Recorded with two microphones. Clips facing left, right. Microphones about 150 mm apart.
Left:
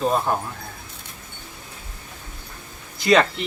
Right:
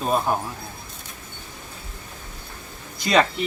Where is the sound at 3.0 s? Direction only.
Centre (ahead or behind).